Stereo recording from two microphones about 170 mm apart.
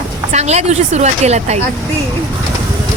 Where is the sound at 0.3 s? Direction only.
40° right (ahead or behind).